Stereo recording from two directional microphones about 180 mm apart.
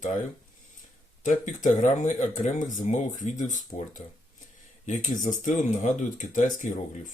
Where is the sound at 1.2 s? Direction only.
45° left (ahead or behind).